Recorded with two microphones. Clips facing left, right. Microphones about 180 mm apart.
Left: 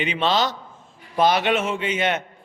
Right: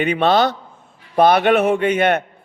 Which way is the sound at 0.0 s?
60° right (ahead or behind).